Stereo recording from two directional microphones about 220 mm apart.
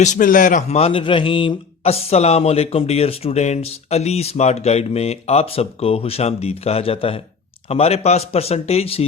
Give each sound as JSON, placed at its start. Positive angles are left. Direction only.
{"t": 0.0, "sound": "a man's voice", "side_deg": 35}